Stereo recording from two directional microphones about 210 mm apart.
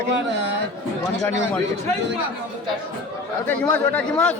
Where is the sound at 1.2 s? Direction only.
10° left (ahead or behind).